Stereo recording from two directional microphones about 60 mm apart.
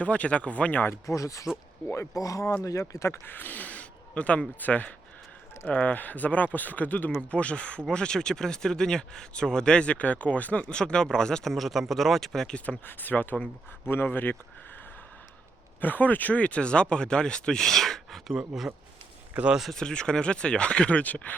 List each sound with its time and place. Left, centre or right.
0.0 s speech: left
1.0 s speech: left
2.8 s speech: left
3.2 s speech: left; by 12.5 s centre
12.5 s speech: left
15.8 s speech: left; by 18.7 s centre
19.7 s speech: centre